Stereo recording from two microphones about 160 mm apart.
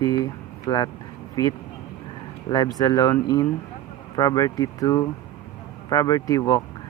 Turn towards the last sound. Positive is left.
turn(degrees=20)  # may be behind; listen again after turning